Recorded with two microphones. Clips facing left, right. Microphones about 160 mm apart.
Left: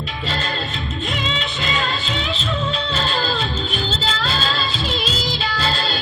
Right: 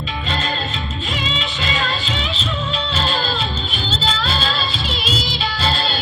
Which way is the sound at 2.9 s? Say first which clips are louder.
Even; 45° left (ahead or behind).